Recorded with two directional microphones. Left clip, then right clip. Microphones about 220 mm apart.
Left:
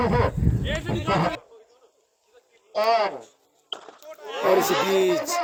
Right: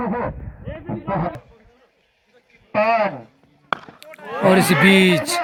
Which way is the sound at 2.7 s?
65° left (ahead or behind).